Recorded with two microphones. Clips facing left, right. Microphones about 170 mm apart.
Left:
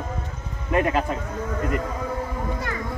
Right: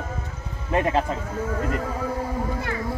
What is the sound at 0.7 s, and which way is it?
Speech, 30° right (ahead or behind).